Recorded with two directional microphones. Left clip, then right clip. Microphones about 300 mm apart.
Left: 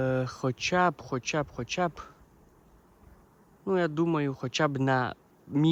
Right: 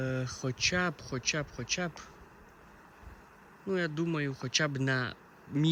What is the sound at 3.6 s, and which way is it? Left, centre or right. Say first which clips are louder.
Speech: left 6 dB; centre.